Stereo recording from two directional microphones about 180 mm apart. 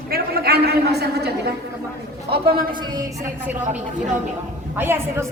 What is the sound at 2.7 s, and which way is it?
Speech, 25° right (ahead or behind).